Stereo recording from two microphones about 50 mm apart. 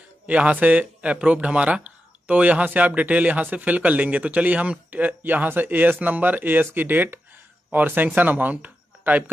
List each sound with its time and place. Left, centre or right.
0.3 s speech: right